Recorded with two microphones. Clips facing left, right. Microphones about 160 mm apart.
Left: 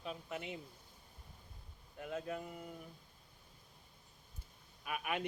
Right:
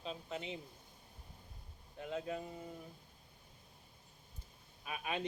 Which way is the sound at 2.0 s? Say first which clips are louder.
Right 1 dB; 25° right (ahead or behind).